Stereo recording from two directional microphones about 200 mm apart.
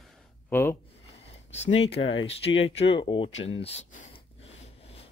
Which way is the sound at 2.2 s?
30° left (ahead or behind).